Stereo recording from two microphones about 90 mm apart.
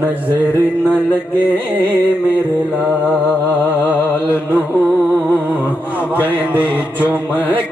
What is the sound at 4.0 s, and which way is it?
Music, 25° left (ahead or behind).